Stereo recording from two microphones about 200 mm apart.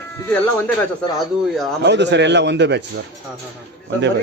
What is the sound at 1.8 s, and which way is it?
Speech, 60° right (ahead or behind).